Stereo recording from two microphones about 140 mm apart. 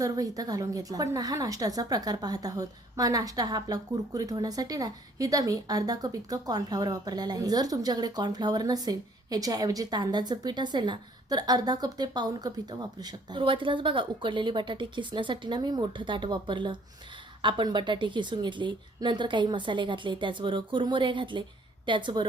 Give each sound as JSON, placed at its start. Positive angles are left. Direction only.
{"t": 0.0, "sound": "a woman's voice", "side_deg": -25}